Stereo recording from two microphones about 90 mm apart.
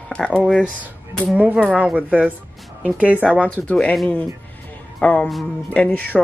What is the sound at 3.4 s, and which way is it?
Speech, 15° left (ahead or behind).